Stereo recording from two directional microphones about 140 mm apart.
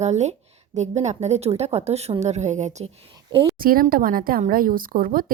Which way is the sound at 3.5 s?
90° right.